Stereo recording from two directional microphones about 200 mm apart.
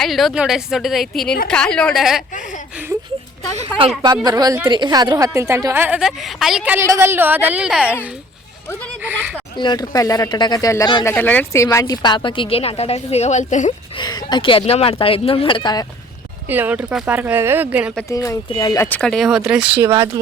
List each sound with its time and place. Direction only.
0.0 s a woman's voice: centre (ahead or behind)
2.3 s a sound: 40° left (ahead or behind)
3.5 s a woman's voice: 30° right (ahead or behind)
4.0 s a woman's voice: 20° right (ahead or behind)
9.0 s speech: 10° right (ahead or behind)
9.6 s speech: 20° left (ahead or behind); by 13.7 s 35° left (ahead or behind)
13.9 s speech: 20° left (ahead or behind)
16.5 s a woman's voice: 10° right (ahead or behind)
18.1 s speech: 15° left (ahead or behind)
18.9 s a woman's voice: 5° left (ahead or behind); by 20.1 s 15° right (ahead or behind)